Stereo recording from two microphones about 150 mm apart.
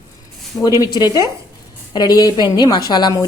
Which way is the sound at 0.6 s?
25° left (ahead or behind).